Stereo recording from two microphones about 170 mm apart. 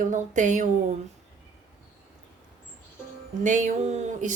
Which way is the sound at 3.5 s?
45° right (ahead or behind).